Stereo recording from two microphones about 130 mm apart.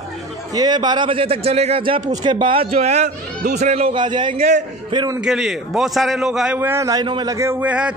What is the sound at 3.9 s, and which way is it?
Speech, 35° right (ahead or behind).